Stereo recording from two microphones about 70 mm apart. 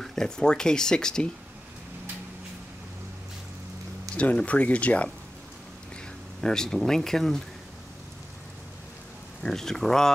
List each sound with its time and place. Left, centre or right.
0.0 s speech: centre
4.2 s speech: centre
6.4 s speech: centre
9.4 s speech: centre